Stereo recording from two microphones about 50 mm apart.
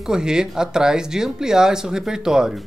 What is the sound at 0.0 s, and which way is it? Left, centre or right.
Speech, centre.